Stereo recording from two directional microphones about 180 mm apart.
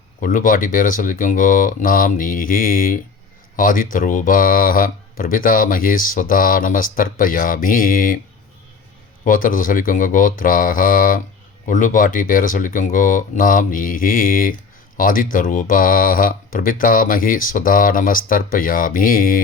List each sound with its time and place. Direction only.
0.2 s speech: 50° left (ahead or behind)
9.2 s speech: 50° left (ahead or behind)